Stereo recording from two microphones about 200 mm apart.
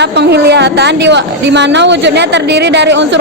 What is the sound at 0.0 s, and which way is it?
A woman's voice, 55° right (ahead or behind).